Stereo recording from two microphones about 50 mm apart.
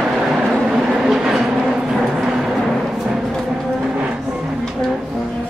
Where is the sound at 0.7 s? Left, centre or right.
Centre.